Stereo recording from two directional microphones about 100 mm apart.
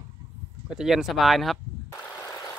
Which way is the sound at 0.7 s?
5° right (ahead or behind).